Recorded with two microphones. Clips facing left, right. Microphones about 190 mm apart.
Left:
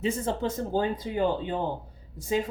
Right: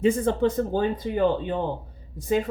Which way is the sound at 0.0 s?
55° right (ahead or behind).